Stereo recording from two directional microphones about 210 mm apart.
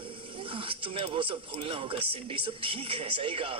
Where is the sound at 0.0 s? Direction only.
25° right (ahead or behind).